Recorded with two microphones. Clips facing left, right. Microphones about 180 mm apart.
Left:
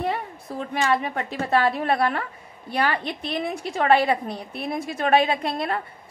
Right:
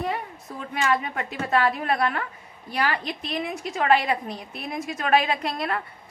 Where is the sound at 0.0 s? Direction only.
30° left (ahead or behind).